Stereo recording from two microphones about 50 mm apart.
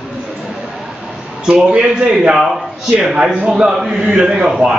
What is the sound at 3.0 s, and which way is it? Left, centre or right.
A man's voice, centre.